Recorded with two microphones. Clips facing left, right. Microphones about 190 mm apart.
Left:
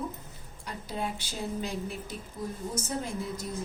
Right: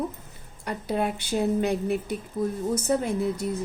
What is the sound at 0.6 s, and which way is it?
A woman's voice, 65° right (ahead or behind).